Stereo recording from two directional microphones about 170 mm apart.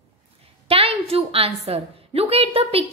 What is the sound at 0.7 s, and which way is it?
A woman's voice, 35° right (ahead or behind).